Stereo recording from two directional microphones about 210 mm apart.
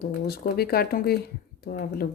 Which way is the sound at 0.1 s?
45° left (ahead or behind).